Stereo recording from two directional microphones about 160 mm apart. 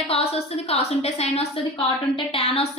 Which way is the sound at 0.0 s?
40° left (ahead or behind).